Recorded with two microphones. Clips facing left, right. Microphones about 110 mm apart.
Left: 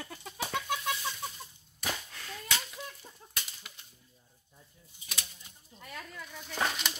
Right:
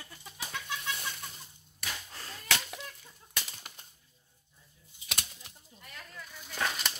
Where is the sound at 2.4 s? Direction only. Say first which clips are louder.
Right 3 dB; 70° right (ahead or behind).